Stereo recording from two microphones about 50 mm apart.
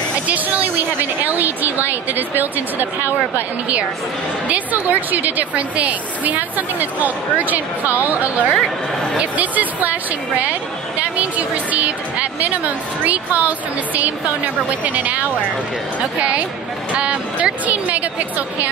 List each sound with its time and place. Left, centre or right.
0.3 s a woman's voice: right
4.5 s a woman's voice: right